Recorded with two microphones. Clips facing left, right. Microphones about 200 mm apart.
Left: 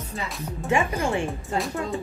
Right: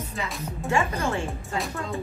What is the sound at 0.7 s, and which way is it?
Speech, 15° left (ahead or behind).